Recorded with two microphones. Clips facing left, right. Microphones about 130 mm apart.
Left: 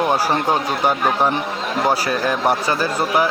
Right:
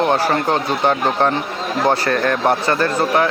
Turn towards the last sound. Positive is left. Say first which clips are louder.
# right 2 dB
turn(degrees=5)  # may be behind; listen again after turning